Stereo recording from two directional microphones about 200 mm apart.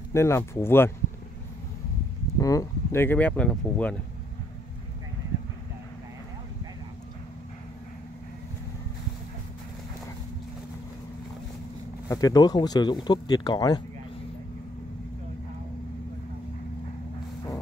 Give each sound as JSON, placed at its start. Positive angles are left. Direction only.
{"t": 0.1, "sound": "speech", "side_deg": 15}
{"t": 2.4, "sound": "speech", "side_deg": 15}
{"t": 12.1, "sound": "speech", "side_deg": 15}